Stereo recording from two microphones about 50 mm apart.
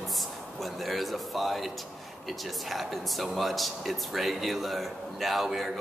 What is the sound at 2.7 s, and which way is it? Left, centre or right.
Speech, centre.